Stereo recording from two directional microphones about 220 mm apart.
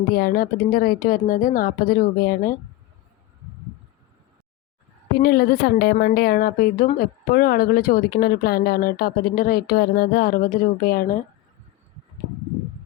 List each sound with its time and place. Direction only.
0.1 s a woman's voice: 40° left (ahead or behind)
5.2 s a woman's voice: 45° left (ahead or behind)